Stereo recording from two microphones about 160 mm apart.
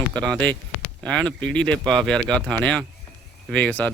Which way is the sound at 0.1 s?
5° left (ahead or behind).